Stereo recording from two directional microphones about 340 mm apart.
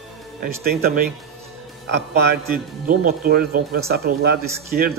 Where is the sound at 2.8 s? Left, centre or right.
Right.